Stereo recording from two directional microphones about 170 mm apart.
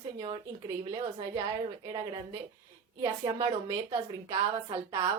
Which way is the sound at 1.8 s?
20° right (ahead or behind).